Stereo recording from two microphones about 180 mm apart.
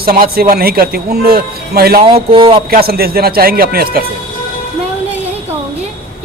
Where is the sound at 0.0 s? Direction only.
55° right (ahead or behind).